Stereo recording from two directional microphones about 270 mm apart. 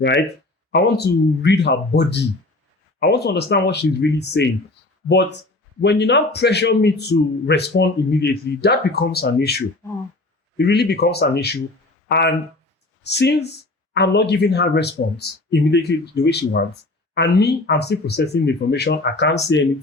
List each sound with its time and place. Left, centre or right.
0.7 s speech: left
5.8 s speech: left